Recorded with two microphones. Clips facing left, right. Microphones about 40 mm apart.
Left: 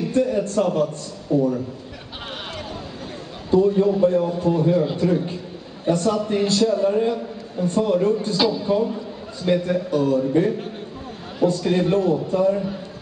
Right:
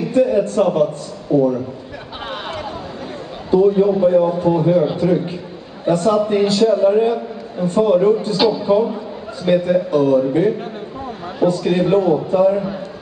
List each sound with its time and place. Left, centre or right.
0.0 s a man's voice: centre
3.4 s a man's voice: centre